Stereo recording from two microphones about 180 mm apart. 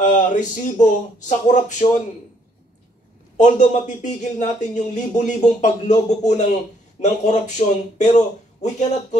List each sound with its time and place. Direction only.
0.0 s speech: 45° left (ahead or behind)
3.3 s speech: 40° left (ahead or behind)